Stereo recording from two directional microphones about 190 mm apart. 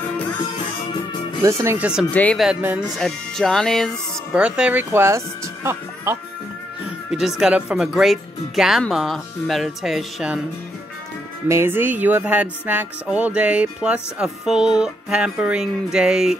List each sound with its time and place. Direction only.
1.4 s music: 15° right (ahead or behind)
2.1 s speech: 5° left (ahead or behind)
3.0 s speech: centre (ahead or behind); by 6.1 s 15° right (ahead or behind)
7.1 s speech: centre (ahead or behind)
11.4 s music: 15° right (ahead or behind)